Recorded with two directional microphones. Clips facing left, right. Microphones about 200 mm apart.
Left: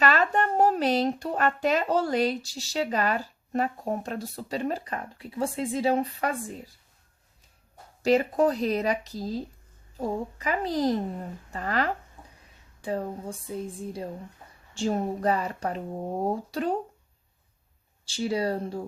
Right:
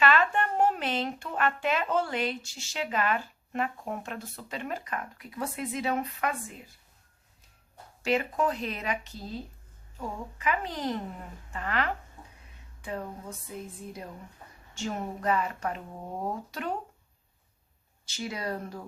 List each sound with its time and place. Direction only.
0.0 s speech: 40° left (ahead or behind)
8.0 s speech: 40° left (ahead or behind)
18.0 s speech: 30° left (ahead or behind)